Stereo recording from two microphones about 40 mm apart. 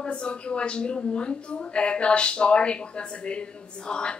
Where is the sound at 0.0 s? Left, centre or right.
Left.